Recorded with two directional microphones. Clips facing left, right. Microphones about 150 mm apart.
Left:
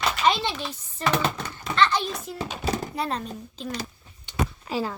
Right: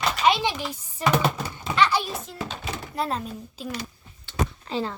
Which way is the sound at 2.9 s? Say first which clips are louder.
Right 1 dB; centre (ahead or behind).